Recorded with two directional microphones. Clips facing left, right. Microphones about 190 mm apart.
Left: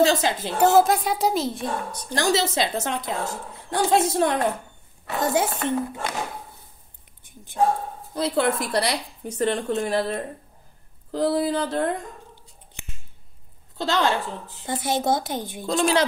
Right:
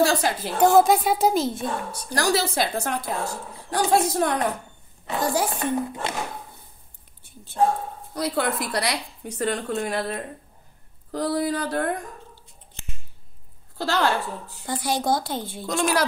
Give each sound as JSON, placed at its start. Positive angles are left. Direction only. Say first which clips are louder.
{"t": 0.0, "sound": "a woman's voice", "louder": "left 1 dB", "side_deg": 20}
{"t": 0.7, "sound": "a woman's voice", "louder": "right 1 dB", "side_deg": 0}
{"t": 2.1, "sound": "a woman's voice", "louder": "left 1 dB", "side_deg": 25}
{"t": 7.2, "sound": "speech", "louder": "left 1 dB", "side_deg": 15}
{"t": 8.1, "sound": "a woman's voice", "louder": "left 3 dB", "side_deg": 25}
{"t": 13.7, "sound": "a woman's voice", "louder": "even", "side_deg": 20}
{"t": 15.6, "sound": "a woman's voice", "louder": "left 2 dB", "side_deg": 30}